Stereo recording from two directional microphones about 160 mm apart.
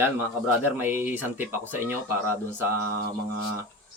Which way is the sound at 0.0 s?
15° right (ahead or behind).